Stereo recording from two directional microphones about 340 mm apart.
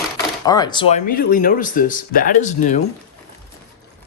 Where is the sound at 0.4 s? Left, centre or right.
Centre.